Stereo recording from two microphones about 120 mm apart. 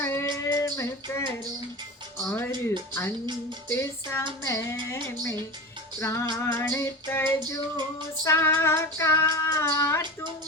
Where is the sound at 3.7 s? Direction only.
20° left (ahead or behind).